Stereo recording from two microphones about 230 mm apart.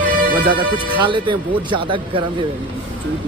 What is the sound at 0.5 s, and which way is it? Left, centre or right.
Speech, right.